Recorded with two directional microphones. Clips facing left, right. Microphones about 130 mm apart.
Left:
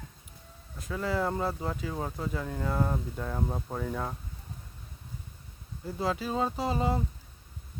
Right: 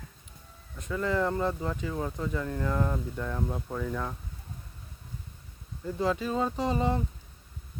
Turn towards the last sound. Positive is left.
turn(degrees=10)  # may be behind; listen again after turning